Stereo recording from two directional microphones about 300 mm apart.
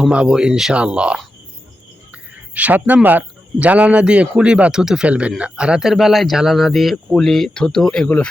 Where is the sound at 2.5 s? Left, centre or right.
Centre.